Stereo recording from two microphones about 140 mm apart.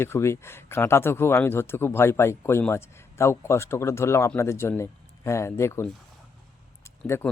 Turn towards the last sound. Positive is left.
turn(degrees=15)  # may be behind; listen again after turning